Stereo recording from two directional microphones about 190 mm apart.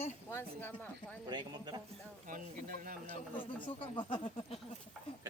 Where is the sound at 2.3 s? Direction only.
45° right (ahead or behind).